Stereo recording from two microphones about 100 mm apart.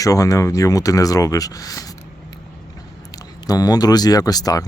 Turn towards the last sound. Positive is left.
turn(degrees=35)  # may be behind; listen again after turning